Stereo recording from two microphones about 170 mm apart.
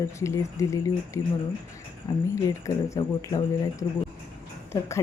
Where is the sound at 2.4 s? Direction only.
20° left (ahead or behind).